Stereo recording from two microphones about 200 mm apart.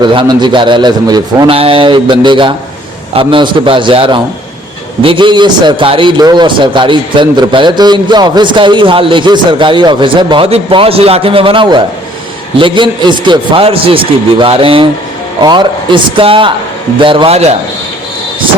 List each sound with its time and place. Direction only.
0.0 s a man's voice: 25° right (ahead or behind)